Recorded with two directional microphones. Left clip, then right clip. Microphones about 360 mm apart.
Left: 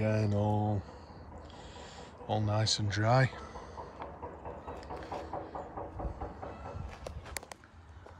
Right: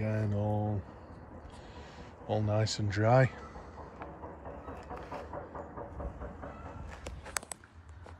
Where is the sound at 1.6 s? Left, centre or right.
Centre.